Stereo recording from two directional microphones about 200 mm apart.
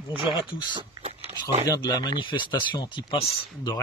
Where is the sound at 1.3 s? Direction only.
30° right (ahead or behind).